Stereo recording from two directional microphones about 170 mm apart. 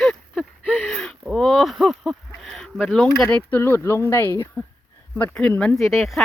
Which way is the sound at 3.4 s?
15° left (ahead or behind).